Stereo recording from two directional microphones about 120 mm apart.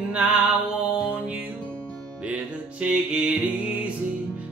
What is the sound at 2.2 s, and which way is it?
Music, 10° right (ahead or behind).